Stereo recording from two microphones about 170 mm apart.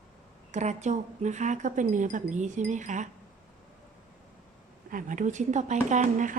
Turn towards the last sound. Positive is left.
turn(degrees=-45)  # may be behind; listen again after turning